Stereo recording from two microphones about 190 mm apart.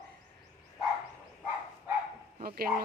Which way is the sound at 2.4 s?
50° right (ahead or behind).